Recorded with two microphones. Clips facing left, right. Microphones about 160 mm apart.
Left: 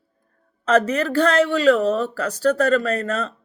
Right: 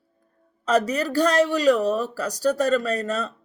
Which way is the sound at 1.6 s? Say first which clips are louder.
Left 3 dB; 15° right (ahead or behind).